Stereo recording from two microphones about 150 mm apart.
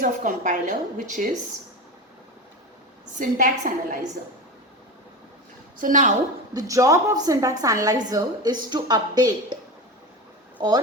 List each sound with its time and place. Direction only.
0.0 s a woman's voice: 60° right (ahead or behind)
3.2 s a woman's voice: 55° right (ahead or behind)
5.8 s a woman's voice: 60° right (ahead or behind)
6.5 s a woman's voice: 25° right (ahead or behind)
10.6 s speech: 25° right (ahead or behind)